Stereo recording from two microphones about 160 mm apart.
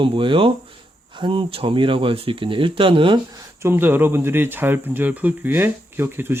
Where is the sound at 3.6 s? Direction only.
15° right (ahead or behind).